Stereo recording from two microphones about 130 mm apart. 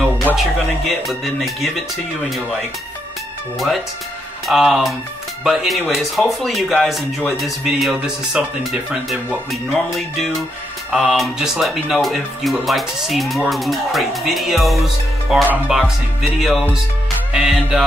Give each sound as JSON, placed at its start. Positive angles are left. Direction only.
{"t": 0.4, "sound": "speech", "side_deg": 0}
{"t": 3.5, "sound": "speech", "side_deg": 0}